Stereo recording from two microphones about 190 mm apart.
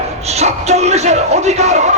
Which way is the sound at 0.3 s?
35° right (ahead or behind).